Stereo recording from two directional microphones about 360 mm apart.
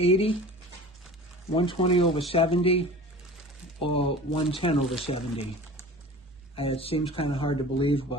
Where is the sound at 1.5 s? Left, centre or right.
Centre.